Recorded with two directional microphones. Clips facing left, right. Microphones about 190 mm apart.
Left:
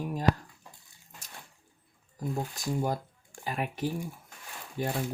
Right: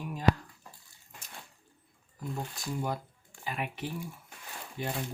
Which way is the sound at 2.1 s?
40° left (ahead or behind).